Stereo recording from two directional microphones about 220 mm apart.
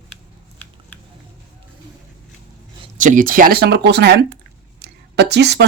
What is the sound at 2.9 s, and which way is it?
Speech, 35° right (ahead or behind).